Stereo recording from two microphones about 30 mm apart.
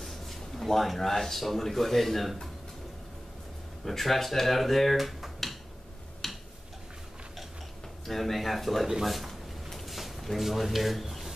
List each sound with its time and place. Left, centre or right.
0.0 s speech: centre
3.8 s speech: centre
6.2 s tick-tock: centre
8.1 s speech: centre
9.3 s a sound: centre
9.8 s a sound: centre
10.4 s speech: centre